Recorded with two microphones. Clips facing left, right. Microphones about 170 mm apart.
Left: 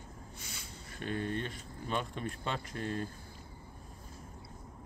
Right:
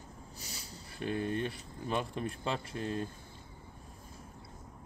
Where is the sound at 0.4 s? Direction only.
35° right (ahead or behind).